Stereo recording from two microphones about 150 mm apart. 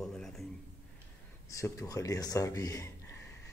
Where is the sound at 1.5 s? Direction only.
20° left (ahead or behind).